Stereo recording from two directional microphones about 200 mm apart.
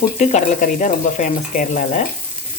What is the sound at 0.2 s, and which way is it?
Speech, 35° left (ahead or behind).